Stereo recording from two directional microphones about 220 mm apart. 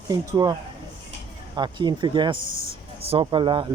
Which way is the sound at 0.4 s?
20° right (ahead or behind).